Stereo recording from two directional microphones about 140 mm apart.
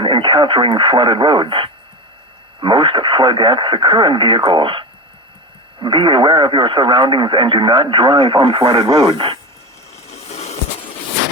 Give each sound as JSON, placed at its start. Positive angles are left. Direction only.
{"t": 0.0, "sound": "speech", "side_deg": -35}
{"t": 10.2, "sound": "vehicle", "side_deg": 50}